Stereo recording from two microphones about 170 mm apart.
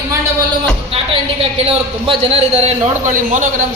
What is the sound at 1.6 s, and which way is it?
A man's voice, 35° right (ahead or behind).